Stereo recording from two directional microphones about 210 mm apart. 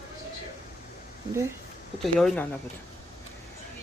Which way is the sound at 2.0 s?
Centre (ahead or behind).